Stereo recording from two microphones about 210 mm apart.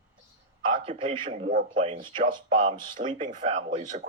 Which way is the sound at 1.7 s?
25° right (ahead or behind).